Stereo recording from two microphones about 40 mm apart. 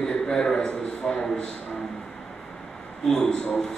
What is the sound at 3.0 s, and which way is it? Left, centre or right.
Speech, centre.